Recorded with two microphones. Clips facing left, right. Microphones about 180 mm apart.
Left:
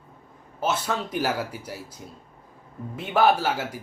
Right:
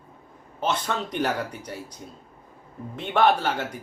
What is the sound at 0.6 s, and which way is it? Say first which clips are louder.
Speech: even; 5° left (ahead or behind).